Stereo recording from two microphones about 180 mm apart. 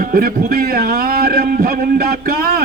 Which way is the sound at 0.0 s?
55° right (ahead or behind).